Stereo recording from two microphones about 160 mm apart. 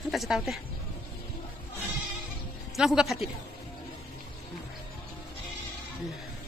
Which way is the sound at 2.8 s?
Centre (ahead or behind).